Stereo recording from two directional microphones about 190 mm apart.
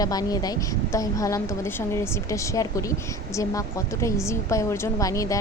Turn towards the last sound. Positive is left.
turn(degrees=15)  # may be behind; listen again after turning